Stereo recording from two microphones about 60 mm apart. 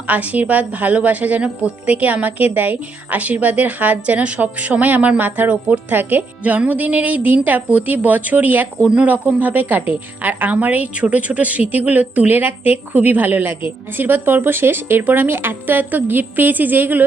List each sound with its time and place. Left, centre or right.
0.1 s a woman's voice: right